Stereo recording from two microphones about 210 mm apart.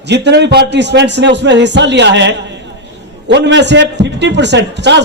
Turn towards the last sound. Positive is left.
turn(degrees=-55)  # may be behind; listen again after turning